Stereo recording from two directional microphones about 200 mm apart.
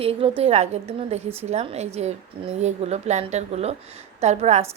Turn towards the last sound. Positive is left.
turn(degrees=-35)  # may be behind; listen again after turning